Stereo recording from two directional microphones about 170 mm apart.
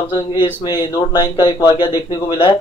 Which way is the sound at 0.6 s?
25° left (ahead or behind).